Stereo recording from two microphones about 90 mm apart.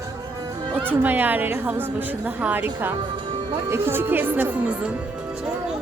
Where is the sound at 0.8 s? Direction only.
20° right (ahead or behind).